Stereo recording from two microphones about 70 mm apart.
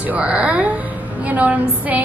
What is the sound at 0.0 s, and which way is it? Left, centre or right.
A woman's voice, centre.